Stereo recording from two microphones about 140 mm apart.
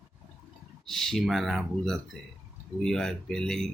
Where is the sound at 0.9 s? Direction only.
Centre (ahead or behind).